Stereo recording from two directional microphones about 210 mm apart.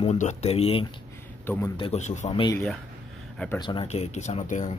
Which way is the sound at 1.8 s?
30° left (ahead or behind).